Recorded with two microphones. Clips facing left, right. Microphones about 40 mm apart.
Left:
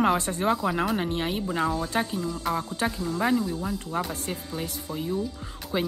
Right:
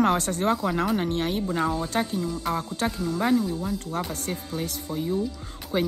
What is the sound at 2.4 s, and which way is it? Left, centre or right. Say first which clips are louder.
Speech: left 1 dB; centre.